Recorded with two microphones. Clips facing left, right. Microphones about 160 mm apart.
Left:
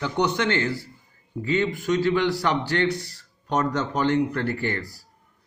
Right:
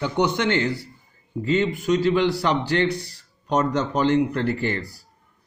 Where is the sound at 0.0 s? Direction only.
15° right (ahead or behind).